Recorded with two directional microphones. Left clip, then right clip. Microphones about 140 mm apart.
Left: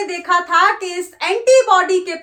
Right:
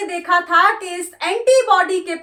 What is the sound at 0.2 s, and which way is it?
A child's voice, 35° left (ahead or behind).